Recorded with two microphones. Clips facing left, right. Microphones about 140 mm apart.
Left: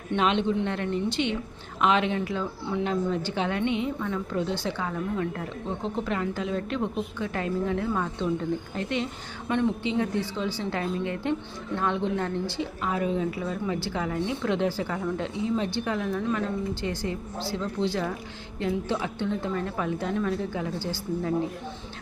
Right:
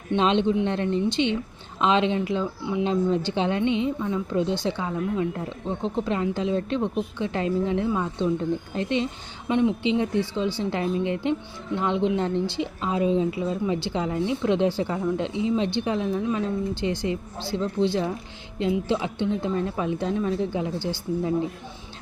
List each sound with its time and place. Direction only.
0.1 s a woman's voice: 25° right (ahead or behind)